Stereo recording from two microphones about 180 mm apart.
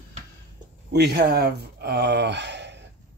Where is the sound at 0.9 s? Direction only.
65° right (ahead or behind).